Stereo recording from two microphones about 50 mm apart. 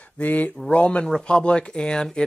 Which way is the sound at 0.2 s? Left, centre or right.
Left.